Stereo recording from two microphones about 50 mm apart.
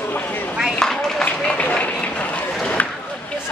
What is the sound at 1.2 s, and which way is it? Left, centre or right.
Run, left.